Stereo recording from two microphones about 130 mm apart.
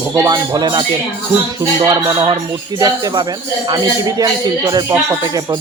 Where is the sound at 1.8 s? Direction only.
30° right (ahead or behind).